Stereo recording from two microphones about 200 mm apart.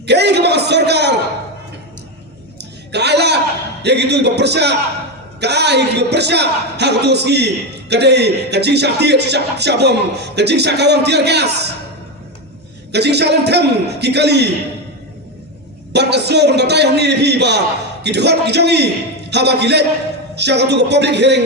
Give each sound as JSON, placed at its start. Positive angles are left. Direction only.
{"t": 0.0, "sound": "a man's voice", "side_deg": -55}
{"t": 2.9, "sound": "a sound", "side_deg": -55}
{"t": 3.8, "sound": "a man's voice", "side_deg": -55}
{"t": 12.9, "sound": "a man's voice", "side_deg": -55}
{"t": 15.9, "sound": "a man's voice", "side_deg": -55}